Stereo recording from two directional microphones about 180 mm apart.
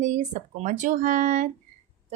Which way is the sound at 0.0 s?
40° right (ahead or behind).